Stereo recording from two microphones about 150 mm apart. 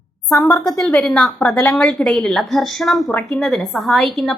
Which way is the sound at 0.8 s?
Centre (ahead or behind).